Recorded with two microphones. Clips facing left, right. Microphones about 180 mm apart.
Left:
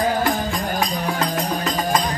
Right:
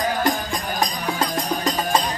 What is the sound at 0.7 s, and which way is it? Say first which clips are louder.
Music: right 1 dB; 35° right (ahead or behind).